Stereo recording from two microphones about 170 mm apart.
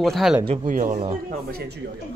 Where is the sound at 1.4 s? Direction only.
70° right (ahead or behind).